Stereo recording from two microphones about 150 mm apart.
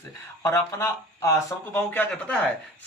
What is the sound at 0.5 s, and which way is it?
Speech, 20° left (ahead or behind).